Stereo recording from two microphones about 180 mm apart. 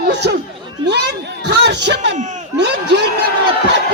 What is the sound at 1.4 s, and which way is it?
A man's voice, 70° right (ahead or behind).